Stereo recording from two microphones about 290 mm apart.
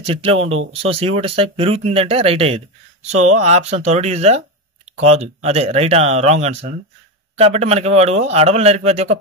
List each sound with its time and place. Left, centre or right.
0.0 s speech: centre